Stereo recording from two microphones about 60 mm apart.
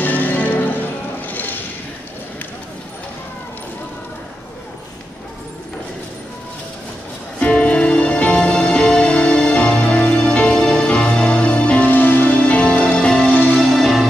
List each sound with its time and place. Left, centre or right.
0.0 s music: left
1.2 s a sound: left
7.3 s music: left
13.7 s music: centre